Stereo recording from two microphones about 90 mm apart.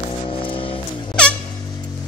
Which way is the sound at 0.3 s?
80° left.